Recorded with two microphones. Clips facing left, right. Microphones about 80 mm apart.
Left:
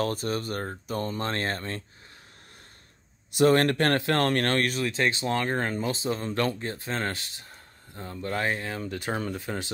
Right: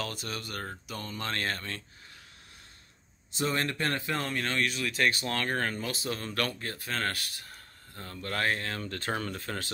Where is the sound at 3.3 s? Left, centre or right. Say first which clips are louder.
Left 10 dB; left.